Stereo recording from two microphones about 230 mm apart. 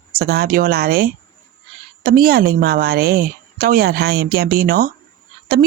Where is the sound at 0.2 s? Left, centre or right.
Right.